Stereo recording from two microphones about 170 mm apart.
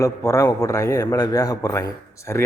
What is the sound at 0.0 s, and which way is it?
A man's voice, 20° left (ahead or behind).